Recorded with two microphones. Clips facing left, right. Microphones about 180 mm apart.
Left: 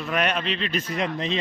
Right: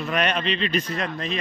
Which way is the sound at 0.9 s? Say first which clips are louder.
Left 2 dB; 20° left (ahead or behind).